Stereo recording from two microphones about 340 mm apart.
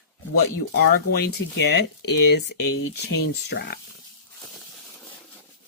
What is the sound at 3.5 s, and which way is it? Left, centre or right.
Speech, left.